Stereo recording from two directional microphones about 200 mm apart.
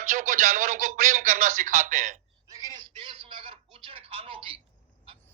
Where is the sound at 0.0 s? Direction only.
40° right (ahead or behind).